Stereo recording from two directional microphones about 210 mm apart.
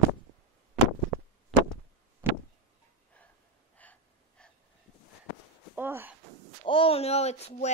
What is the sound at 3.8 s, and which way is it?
Gasp, 5° left (ahead or behind).